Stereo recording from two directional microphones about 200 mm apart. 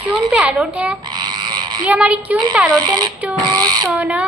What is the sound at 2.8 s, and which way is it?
Speech, 20° right (ahead or behind).